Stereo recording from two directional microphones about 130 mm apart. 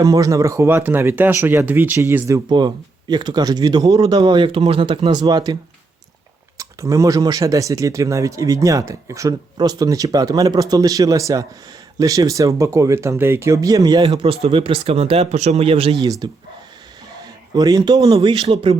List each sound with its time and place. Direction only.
0.0 s speech: 25° right (ahead or behind)
2.5 s speech: 35° right (ahead or behind)
6.6 s speech: 25° right (ahead or behind)
14.1 s speech: 50° right (ahead or behind)
16.2 s speech: 35° right (ahead or behind)
17.5 s speech: 30° right (ahead or behind); by 18.8 s 50° right (ahead or behind)